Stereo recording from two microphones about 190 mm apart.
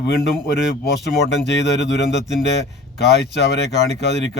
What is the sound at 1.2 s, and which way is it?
Speech, 65° left (ahead or behind).